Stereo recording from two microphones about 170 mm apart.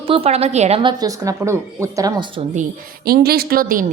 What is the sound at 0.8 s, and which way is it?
A woman's voice, 25° right (ahead or behind).